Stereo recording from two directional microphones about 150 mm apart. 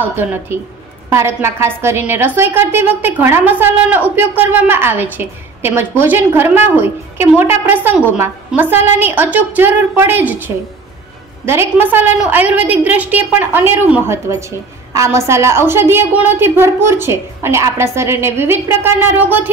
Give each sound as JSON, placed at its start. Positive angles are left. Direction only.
{"t": 0.0, "sound": "a woman's voice", "side_deg": -15}